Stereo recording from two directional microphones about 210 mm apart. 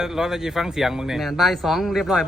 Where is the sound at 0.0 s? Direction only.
Centre (ahead or behind).